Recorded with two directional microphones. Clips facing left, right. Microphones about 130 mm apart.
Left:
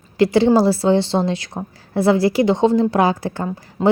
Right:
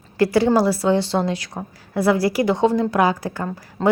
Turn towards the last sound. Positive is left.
turn(degrees=10)  # may be behind; listen again after turning